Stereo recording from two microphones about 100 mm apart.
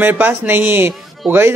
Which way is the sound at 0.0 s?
20° right (ahead or behind).